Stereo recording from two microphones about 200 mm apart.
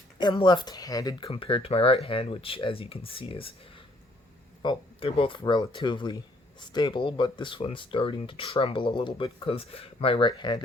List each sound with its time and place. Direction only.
0.2 s speech: 20° left (ahead or behind)
4.6 s speech: 25° left (ahead or behind)